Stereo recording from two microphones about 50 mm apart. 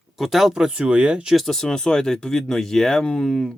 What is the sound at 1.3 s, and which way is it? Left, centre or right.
Speech, centre.